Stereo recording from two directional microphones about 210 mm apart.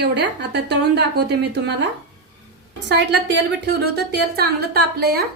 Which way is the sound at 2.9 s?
55° right (ahead or behind).